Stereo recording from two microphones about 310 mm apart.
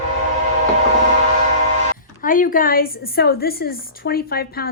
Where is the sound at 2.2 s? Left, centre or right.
Left.